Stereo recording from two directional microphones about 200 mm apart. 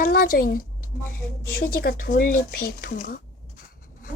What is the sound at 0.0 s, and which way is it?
Speech, 45° left (ahead or behind).